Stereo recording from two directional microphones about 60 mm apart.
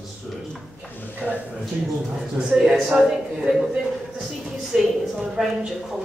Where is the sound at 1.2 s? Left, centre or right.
Left.